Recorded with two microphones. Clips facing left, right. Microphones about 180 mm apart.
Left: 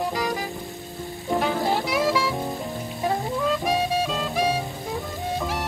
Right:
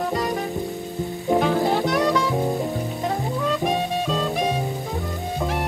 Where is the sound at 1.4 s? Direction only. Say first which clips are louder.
Right 2 dB; centre (ahead or behind).